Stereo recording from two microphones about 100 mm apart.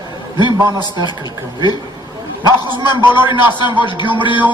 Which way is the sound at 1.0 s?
45° left (ahead or behind).